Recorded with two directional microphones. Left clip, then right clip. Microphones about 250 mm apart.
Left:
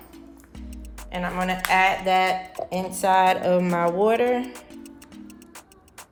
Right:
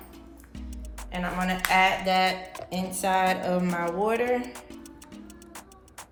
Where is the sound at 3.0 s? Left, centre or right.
Left.